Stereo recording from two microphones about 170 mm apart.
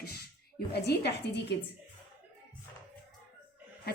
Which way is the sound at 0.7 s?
80° left.